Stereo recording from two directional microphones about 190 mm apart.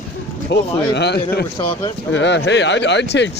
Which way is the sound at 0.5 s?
60° left (ahead or behind).